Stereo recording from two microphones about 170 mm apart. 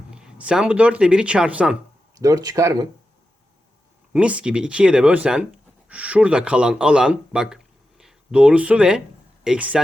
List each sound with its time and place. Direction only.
0.1 s speech: 5° right (ahead or behind)
2.1 s speech: 20° right (ahead or behind)
4.1 s a man's voice: 5° right (ahead or behind)